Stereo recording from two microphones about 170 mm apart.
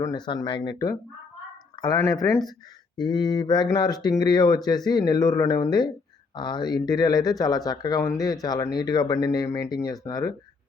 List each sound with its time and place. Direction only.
0.0 s speech: 25° left (ahead or behind)